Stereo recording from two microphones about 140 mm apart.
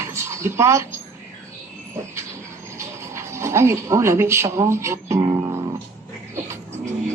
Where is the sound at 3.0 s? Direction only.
20° right (ahead or behind).